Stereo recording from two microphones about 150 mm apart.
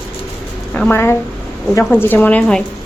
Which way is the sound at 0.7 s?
10° left (ahead or behind).